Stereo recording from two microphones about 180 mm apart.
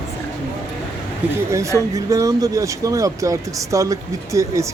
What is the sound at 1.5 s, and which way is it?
Speech, 15° right (ahead or behind).